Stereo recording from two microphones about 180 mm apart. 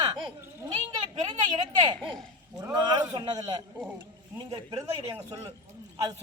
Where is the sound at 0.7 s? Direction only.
25° right (ahead or behind).